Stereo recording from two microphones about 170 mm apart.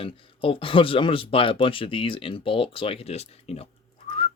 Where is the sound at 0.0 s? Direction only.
30° left (ahead or behind).